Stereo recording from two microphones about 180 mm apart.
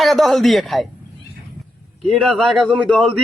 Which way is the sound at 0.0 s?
Centre (ahead or behind).